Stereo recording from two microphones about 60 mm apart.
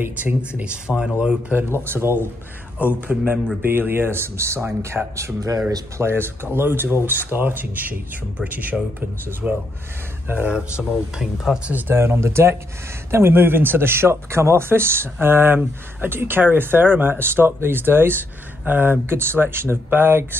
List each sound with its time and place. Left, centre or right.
0.0 s speech: right
1.5 s a man's voice: right
2.8 s a man's voice: right
5.9 s a man's voice: right
9.4 s speech: centre
10.2 s speech: right
10.5 s speech: centre
11.9 s a man's voice: right